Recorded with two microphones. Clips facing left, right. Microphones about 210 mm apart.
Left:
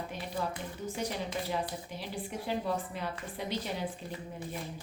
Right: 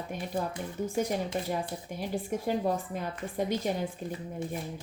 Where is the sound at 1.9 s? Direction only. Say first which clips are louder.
Right 6 dB; 50° right (ahead or behind).